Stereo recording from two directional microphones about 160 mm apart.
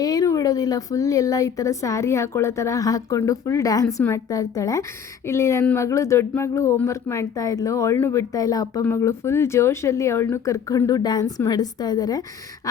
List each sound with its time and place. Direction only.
0.0 s speech: 25° left (ahead or behind)